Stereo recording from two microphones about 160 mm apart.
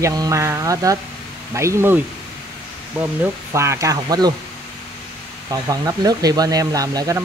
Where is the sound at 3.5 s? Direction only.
20° right (ahead or behind).